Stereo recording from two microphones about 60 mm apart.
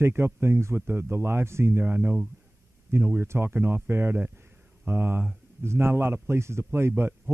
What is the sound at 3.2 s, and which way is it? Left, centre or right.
A man's voice, right.